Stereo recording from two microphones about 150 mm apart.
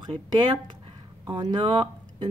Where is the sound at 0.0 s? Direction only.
30° right (ahead or behind).